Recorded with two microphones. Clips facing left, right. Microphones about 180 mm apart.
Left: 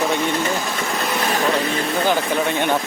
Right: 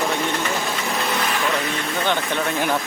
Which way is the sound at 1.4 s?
35° left (ahead or behind).